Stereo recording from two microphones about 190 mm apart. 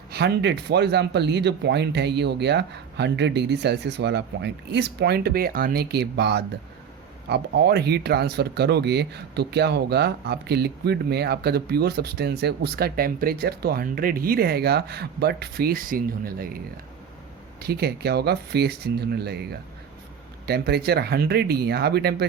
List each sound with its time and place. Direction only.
0.1 s speech: 60° right (ahead or behind)
17.6 s speech: 55° right (ahead or behind)